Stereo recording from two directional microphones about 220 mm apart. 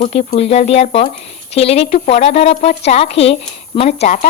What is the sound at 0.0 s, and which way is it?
Speech, 30° left (ahead or behind).